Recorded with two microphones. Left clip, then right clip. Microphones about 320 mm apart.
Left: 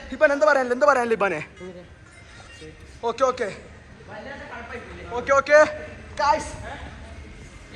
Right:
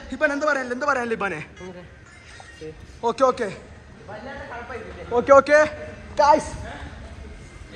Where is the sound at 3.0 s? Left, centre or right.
Centre.